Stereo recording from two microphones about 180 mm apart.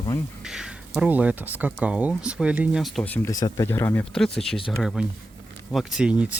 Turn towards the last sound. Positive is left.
turn(degrees=-5)  # may be behind; listen again after turning